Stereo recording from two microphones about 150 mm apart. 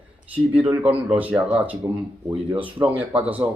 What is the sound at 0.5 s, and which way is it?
Speech, 10° right (ahead or behind).